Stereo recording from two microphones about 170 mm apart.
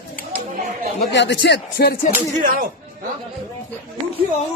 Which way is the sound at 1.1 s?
90° left.